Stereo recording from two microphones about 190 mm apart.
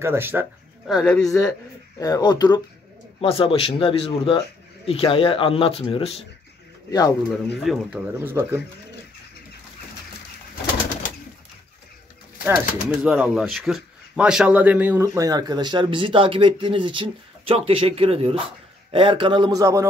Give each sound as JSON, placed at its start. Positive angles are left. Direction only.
{"t": 0.0, "sound": "speech", "side_deg": -10}
{"t": 1.2, "sound": "a man's voice", "side_deg": 20}
{"t": 6.9, "sound": "speech", "side_deg": 20}
{"t": 7.6, "sound": "speech", "side_deg": -10}
{"t": 12.4, "sound": "speech", "side_deg": -5}